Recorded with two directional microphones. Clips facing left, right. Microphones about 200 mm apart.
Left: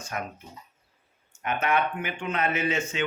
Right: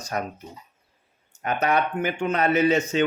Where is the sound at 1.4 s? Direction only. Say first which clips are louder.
Right 3 dB; 40° right (ahead or behind).